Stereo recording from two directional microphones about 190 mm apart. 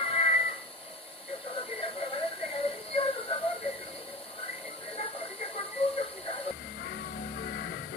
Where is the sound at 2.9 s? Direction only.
30° left (ahead or behind).